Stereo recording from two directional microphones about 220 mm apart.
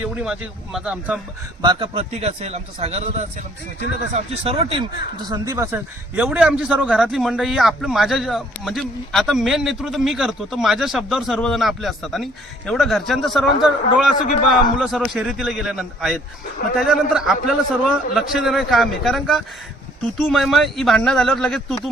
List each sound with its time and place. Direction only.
0.0 s a man's voice: 5° right (ahead or behind)
1.6 s a man's voice: 20° right (ahead or behind)
5.3 s a man's voice: 15° right (ahead or behind); by 21.8 s centre (ahead or behind)